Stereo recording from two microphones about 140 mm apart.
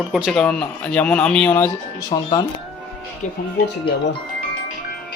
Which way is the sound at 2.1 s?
30° left (ahead or behind).